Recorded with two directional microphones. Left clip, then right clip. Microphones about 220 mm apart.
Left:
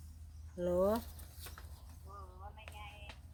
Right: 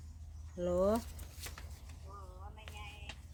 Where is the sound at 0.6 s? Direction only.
Centre (ahead or behind).